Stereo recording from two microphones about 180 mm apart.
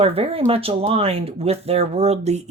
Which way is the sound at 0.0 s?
35° right (ahead or behind).